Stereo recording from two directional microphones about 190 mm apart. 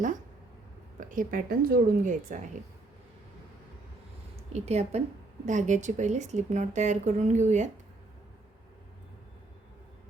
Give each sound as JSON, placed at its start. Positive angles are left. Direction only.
{"t": 0.9, "sound": "speech", "side_deg": -45}
{"t": 4.5, "sound": "a woman's voice", "side_deg": -35}